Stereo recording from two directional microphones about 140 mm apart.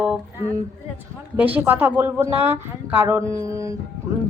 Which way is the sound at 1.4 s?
10° right (ahead or behind).